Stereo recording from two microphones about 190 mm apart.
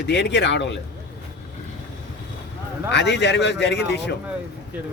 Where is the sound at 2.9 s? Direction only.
65° left (ahead or behind).